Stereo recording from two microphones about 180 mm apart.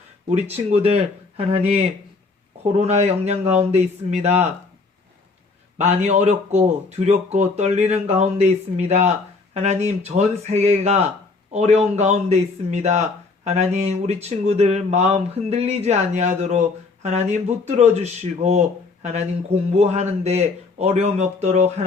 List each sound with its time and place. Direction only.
0.3 s speech: 35° right (ahead or behind)
5.7 s speech: 35° right (ahead or behind)
19.7 s speech: 35° right (ahead or behind)